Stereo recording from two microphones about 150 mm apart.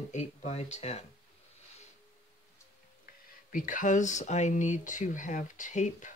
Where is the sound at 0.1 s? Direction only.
50° left (ahead or behind).